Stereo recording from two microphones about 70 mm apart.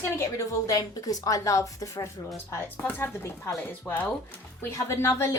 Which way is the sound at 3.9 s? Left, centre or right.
Left.